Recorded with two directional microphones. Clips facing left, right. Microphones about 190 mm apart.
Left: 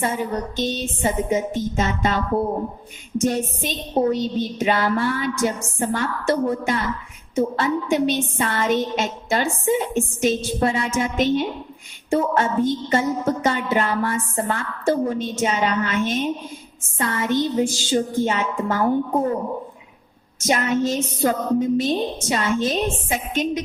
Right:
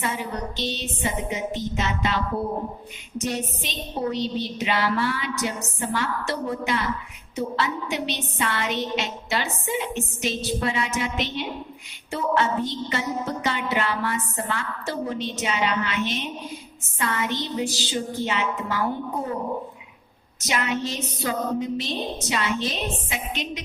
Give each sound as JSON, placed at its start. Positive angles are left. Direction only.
{"t": 0.0, "sound": "music", "side_deg": 45}
{"t": 20.4, "sound": "music", "side_deg": 45}